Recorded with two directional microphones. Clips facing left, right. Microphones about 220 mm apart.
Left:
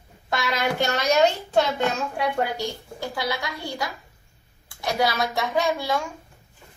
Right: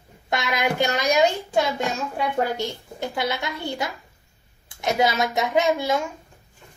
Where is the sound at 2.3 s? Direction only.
20° right (ahead or behind).